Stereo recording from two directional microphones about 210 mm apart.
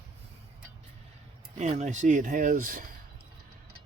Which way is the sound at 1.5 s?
30° right (ahead or behind).